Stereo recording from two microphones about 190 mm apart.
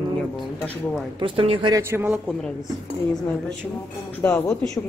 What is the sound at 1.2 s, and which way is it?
Speech, 30° right (ahead or behind).